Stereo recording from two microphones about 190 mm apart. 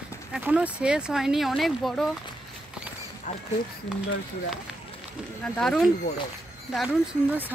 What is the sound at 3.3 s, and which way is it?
Speech, 40° left (ahead or behind).